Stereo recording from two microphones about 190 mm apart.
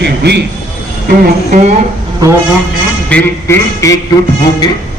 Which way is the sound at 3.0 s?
5° left (ahead or behind).